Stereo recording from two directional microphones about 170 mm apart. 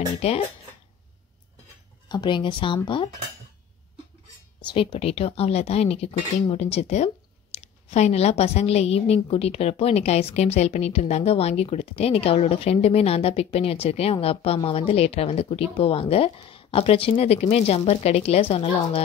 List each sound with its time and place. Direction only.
0.2 s a woman's voice: 35° left (ahead or behind)
2.0 s speech: 25° left (ahead or behind)
4.6 s a woman's voice: 35° left (ahead or behind)